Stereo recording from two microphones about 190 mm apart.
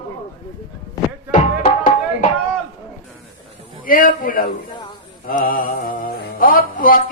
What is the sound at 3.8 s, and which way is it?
Music, 45° left (ahead or behind).